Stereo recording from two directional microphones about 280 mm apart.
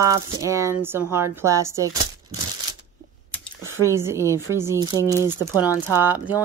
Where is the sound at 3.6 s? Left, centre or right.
Centre.